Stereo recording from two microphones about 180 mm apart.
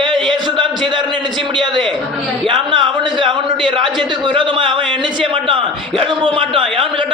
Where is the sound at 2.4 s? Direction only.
25° right (ahead or behind).